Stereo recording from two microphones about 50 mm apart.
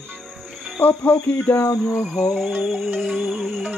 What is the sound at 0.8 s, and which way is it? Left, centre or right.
Speech, left.